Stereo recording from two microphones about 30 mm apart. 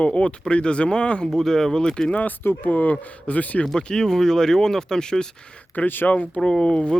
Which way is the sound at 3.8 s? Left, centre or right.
Left.